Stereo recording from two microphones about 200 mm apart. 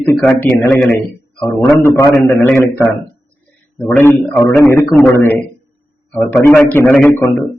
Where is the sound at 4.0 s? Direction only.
10° left (ahead or behind).